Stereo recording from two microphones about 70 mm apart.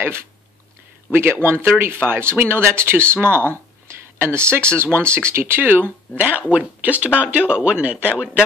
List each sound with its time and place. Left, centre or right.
1.1 s speech: right
3.8 s a sound: right
4.7 s speech: right; by 8.3 s centre